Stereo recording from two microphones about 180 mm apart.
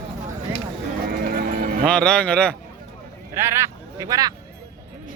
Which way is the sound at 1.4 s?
50° right (ahead or behind).